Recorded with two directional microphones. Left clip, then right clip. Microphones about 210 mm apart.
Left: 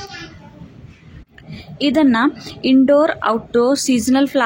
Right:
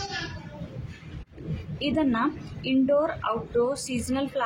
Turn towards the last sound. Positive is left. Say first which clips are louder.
# left 13 dB
turn(degrees=35)  # may be behind; listen again after turning